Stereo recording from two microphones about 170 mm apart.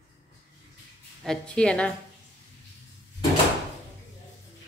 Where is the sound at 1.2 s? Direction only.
5° left (ahead or behind).